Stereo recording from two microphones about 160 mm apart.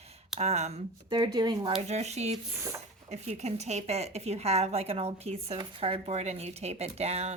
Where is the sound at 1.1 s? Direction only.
25° right (ahead or behind).